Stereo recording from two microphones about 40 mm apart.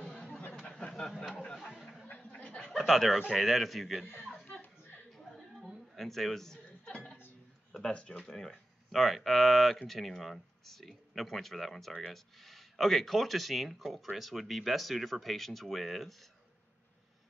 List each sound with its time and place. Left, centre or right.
0.1 s chatter: centre
0.6 s a sound: left
1.3 s speech: left
2.1 s a sound: left
2.6 s chuckle: centre
3.3 s speech: centre
5.9 s a sound: centre; by 7.2 s left
7.8 s speech: left
8.2 s speech: centre
8.9 s speech: centre